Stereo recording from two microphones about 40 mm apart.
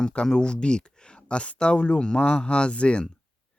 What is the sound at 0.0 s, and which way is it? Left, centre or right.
Speech, left.